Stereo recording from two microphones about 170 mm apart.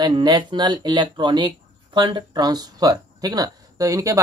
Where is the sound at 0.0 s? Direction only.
25° right (ahead or behind).